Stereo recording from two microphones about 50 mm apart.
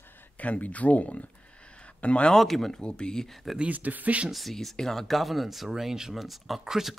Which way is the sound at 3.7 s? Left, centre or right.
Right.